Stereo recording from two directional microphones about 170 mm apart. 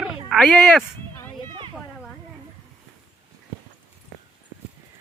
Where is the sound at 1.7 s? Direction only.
Centre (ahead or behind).